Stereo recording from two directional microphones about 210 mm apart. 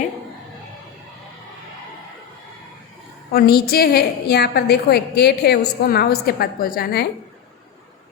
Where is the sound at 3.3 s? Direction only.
45° left (ahead or behind).